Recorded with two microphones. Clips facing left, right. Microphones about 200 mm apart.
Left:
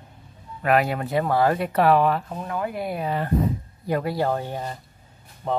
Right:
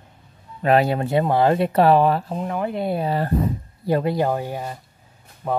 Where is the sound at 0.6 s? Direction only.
30° right (ahead or behind).